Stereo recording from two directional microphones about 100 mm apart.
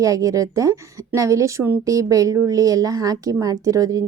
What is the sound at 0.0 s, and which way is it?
Speech, 35° right (ahead or behind).